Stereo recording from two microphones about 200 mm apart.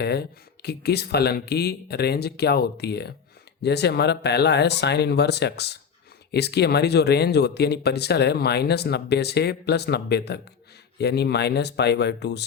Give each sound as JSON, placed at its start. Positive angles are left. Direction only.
{"t": 0.0, "sound": "speech", "side_deg": 55}